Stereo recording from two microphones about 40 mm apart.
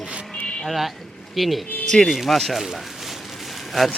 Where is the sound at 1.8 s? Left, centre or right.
Centre.